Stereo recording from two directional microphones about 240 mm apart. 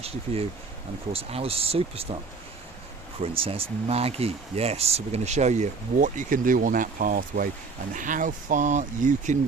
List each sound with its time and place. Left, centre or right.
1.1 s speech: right
3.2 s speech: right